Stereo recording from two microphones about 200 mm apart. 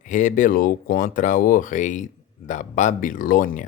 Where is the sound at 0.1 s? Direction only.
40° left (ahead or behind).